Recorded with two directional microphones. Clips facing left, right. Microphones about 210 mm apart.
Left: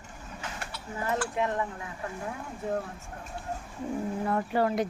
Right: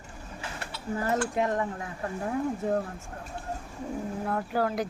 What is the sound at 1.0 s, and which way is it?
Speech, 40° right (ahead or behind).